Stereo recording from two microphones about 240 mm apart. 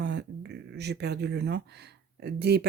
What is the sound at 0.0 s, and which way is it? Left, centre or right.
Speech, right.